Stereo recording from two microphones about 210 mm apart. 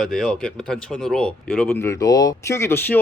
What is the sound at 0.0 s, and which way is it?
Speech, centre (ahead or behind).